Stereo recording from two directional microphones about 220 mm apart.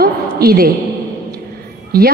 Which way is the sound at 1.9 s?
45° right (ahead or behind).